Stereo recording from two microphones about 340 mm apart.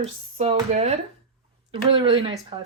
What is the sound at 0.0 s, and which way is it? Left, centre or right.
Speech, centre.